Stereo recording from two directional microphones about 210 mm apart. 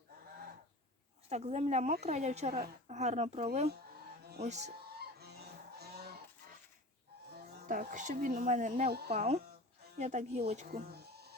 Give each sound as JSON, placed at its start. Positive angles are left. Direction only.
{"t": 1.3, "sound": "a woman's voice", "side_deg": -30}
{"t": 4.9, "sound": "goose", "side_deg": -50}
{"t": 7.7, "sound": "a woman's voice", "side_deg": -40}
{"t": 8.9, "sound": "speech", "side_deg": -50}
{"t": 9.1, "sound": "a woman's voice", "side_deg": -30}
{"t": 10.7, "sound": "bleat", "side_deg": -50}